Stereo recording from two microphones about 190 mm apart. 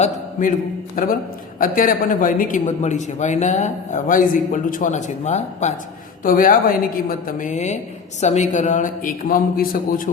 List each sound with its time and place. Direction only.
0.0 s a man's voice: 40° left (ahead or behind)